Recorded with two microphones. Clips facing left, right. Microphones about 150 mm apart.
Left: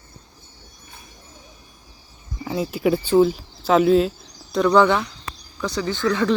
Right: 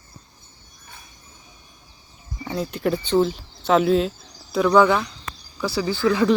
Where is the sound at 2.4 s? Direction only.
5° left (ahead or behind).